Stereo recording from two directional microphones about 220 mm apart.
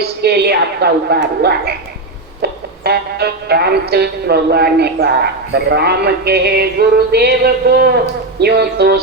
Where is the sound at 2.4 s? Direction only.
45° right (ahead or behind).